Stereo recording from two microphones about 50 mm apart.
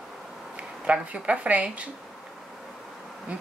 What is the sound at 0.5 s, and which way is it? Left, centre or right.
Speech, right.